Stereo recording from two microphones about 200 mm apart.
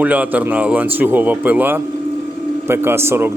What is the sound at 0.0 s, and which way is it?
A man's voice, 5° right (ahead or behind).